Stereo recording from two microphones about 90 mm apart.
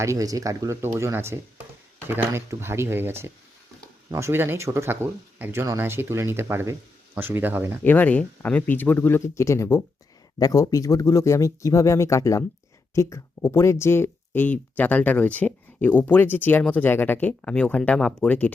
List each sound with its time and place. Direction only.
0.0 s speech: 40° right (ahead or behind)
0.8 s speech: 30° right (ahead or behind)
7.9 s speech: 20° left (ahead or behind)
10.3 s speech: 45° left (ahead or behind); by 18.5 s 15° left (ahead or behind)